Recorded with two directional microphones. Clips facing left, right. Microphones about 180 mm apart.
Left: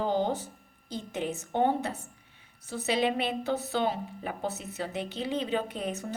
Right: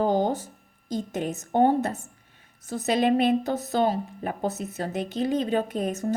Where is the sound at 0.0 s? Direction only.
45° right (ahead or behind).